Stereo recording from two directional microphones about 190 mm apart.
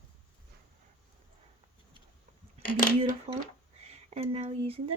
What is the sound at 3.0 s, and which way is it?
Speech, 30° right (ahead or behind).